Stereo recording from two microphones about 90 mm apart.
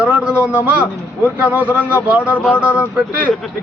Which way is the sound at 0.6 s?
15° right (ahead or behind).